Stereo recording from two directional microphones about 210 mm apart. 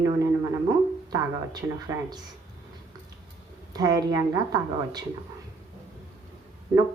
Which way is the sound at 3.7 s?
20° right (ahead or behind).